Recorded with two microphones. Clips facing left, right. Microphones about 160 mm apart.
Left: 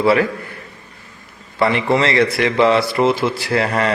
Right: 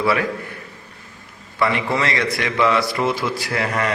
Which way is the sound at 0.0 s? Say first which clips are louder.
Left 5 dB; 25° left (ahead or behind).